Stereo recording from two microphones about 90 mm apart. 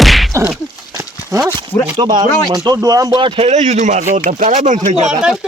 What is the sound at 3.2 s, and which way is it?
Speech, 80° right.